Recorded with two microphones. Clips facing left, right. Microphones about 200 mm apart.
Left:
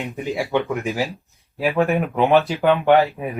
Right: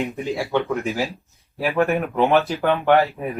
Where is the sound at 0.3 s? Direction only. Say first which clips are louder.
Left 2 dB; 15° left (ahead or behind).